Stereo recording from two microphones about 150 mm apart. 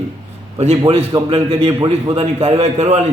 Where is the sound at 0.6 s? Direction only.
45° right (ahead or behind).